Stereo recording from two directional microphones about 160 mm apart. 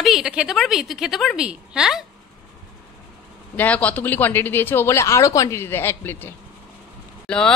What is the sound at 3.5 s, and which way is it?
A woman's voice, 10° left (ahead or behind).